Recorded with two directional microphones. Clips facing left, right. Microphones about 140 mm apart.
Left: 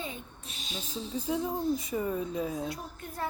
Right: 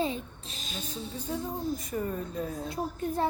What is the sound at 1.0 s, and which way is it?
Speech, centre (ahead or behind).